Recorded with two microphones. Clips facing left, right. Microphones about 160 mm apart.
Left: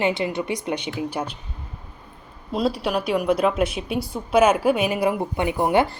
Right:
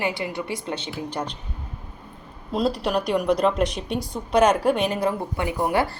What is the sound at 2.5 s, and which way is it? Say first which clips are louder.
A woman's voice: even; centre (ahead or behind).